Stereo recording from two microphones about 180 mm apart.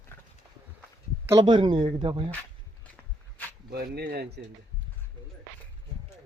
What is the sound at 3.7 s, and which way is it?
Speech, 60° right (ahead or behind).